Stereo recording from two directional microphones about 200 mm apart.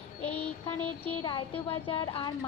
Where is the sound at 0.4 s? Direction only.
30° left (ahead or behind).